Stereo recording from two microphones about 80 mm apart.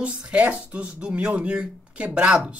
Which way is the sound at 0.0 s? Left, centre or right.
Centre.